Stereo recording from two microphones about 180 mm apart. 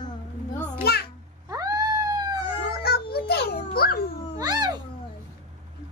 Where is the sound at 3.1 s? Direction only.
60° left (ahead or behind).